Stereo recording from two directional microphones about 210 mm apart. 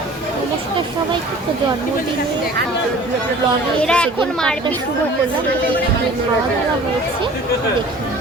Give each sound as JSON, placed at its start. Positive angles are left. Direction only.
{"t": 3.8, "sound": "speech", "side_deg": 5}